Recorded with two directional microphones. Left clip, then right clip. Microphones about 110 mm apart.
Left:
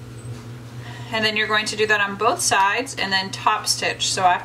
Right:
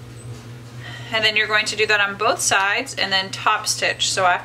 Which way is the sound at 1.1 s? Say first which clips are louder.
Right 2 dB; 15° right (ahead or behind).